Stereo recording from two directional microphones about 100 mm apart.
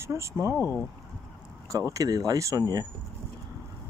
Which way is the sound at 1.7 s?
35° right (ahead or behind).